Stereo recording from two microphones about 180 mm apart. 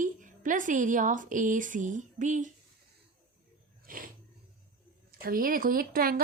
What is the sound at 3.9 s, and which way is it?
Speech, 50° right (ahead or behind).